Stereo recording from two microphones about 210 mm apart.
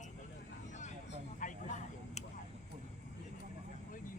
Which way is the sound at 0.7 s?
35° left (ahead or behind).